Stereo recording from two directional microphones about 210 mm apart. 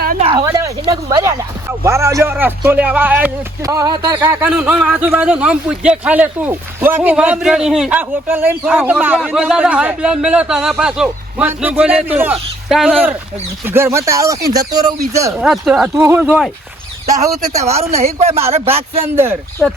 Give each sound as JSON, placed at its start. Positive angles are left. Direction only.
{"t": 0.3, "sound": "a man's voice", "side_deg": -15}
{"t": 15.4, "sound": "a man's voice", "side_deg": 0}
{"t": 17.6, "sound": "speech", "side_deg": -30}
{"t": 19.1, "sound": "a man's voice", "side_deg": -10}